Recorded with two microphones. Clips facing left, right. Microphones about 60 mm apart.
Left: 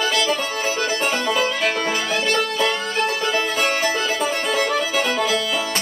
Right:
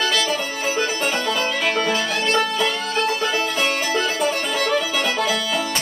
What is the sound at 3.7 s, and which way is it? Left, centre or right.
Music, centre.